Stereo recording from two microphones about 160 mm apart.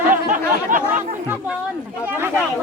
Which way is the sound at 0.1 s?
55° right (ahead or behind).